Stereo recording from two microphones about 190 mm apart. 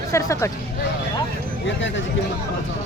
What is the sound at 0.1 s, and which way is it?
Speech, 15° left (ahead or behind).